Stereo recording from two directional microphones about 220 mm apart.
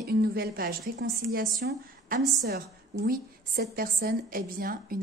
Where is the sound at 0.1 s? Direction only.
45° right (ahead or behind).